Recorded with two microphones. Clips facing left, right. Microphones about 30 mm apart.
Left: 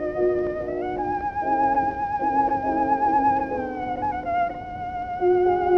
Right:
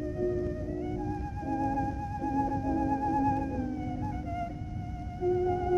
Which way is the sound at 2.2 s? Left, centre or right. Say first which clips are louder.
Left 8 dB; left.